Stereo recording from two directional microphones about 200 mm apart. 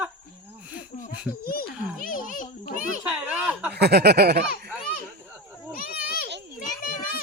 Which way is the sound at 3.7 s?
55° right (ahead or behind).